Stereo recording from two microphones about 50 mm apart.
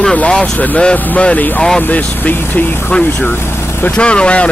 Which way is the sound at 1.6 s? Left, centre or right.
Centre.